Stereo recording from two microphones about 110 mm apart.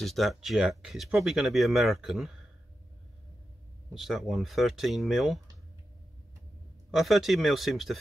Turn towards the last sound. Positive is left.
turn(degrees=0)  # may be behind; listen again after turning